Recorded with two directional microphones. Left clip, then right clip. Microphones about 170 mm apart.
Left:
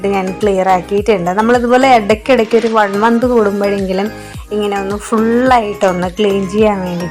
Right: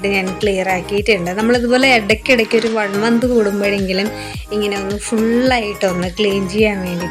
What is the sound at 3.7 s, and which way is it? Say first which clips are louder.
Speech: left 2 dB; 25° left (ahead or behind).